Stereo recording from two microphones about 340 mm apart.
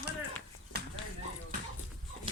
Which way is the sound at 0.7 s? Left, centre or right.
Right.